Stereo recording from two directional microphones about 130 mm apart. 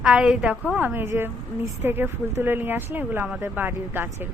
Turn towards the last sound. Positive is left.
turn(degrees=-15)  # may be behind; listen again after turning